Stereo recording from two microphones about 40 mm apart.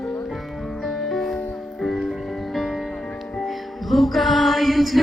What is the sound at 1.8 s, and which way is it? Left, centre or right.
Music, centre.